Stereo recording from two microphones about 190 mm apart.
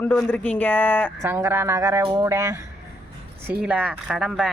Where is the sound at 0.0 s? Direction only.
10° left (ahead or behind).